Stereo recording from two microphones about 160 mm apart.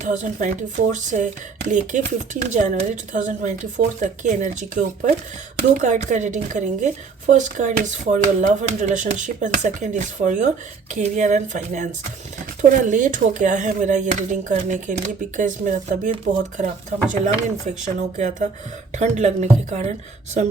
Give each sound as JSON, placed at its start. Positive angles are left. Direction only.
{"t": 0.0, "sound": "speech", "side_deg": -50}